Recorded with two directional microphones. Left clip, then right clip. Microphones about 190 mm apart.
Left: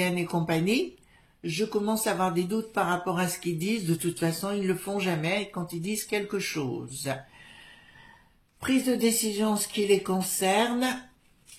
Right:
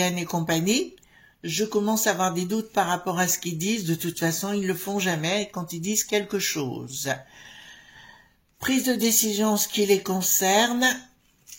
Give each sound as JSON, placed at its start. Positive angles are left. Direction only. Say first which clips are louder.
{"t": 0.0, "sound": "speech", "louder": "right 2 dB", "side_deg": -35}
{"t": 8.5, "sound": "speech", "louder": "right 2 dB", "side_deg": -40}